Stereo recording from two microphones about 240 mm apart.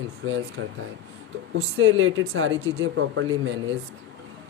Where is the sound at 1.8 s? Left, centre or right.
Right.